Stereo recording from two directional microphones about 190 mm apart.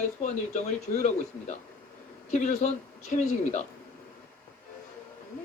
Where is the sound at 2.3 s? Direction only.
40° left (ahead or behind).